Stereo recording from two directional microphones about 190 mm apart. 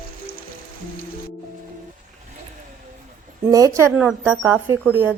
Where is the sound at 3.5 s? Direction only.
15° right (ahead or behind).